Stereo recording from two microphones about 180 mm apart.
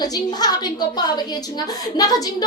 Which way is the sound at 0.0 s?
20° left (ahead or behind).